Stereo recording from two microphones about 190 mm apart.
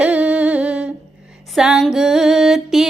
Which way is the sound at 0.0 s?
5° right (ahead or behind).